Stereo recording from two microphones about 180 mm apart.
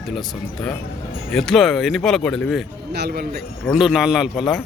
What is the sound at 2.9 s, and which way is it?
Speech, 65° right (ahead or behind).